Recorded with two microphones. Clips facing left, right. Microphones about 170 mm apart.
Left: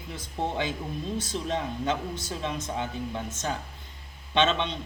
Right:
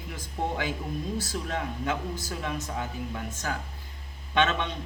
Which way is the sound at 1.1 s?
20° left (ahead or behind).